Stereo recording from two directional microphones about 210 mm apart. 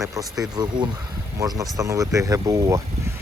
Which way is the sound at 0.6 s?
20° right (ahead or behind).